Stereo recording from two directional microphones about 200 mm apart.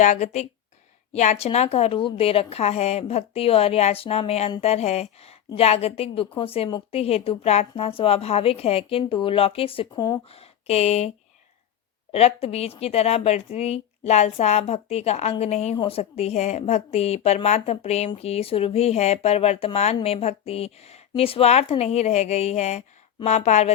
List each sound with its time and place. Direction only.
0.0 s a woman's voice: 35° left (ahead or behind)
12.1 s speech: 30° left (ahead or behind)